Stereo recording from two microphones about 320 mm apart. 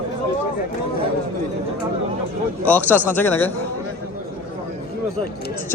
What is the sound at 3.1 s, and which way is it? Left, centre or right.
Speech, centre.